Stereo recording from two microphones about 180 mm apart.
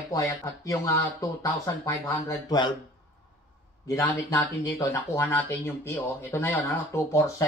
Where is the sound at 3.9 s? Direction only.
15° left (ahead or behind).